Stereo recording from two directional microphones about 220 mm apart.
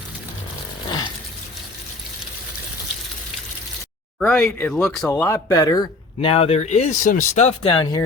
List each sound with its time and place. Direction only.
0.9 s livestock: 20° left (ahead or behind)
4.2 s speech: centre (ahead or behind)
5.1 s speech: 15° left (ahead or behind)